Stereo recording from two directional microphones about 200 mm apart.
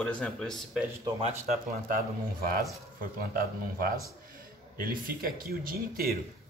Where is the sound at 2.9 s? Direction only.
45° right (ahead or behind).